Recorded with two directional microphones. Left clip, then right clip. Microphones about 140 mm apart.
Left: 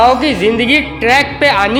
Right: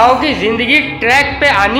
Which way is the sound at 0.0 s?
45° left (ahead or behind).